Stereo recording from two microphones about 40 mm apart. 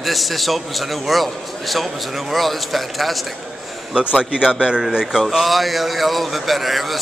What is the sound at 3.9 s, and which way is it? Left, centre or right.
Speech, right.